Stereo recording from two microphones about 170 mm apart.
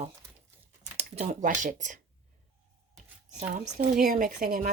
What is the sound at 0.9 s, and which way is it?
Speech, 40° right (ahead or behind).